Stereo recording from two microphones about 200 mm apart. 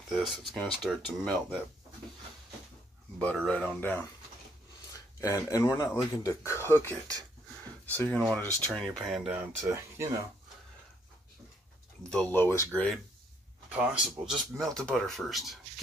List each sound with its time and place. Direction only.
0.1 s speech: centre (ahead or behind)
3.2 s speech: 5° left (ahead or behind); by 10.1 s 10° right (ahead or behind)
12.1 s speech: 10° left (ahead or behind)
13.7 s speech: 5° right (ahead or behind)